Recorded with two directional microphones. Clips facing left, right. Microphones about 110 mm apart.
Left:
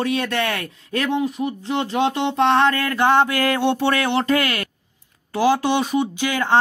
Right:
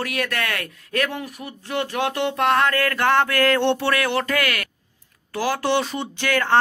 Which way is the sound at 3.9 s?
25° left (ahead or behind).